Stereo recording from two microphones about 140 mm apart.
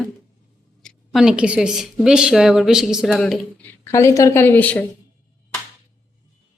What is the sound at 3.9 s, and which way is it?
Speech, 20° left (ahead or behind).